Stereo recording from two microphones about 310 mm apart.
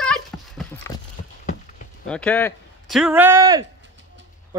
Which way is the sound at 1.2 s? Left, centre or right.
Left.